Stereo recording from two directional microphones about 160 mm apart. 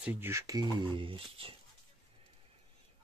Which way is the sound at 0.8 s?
30° right (ahead or behind).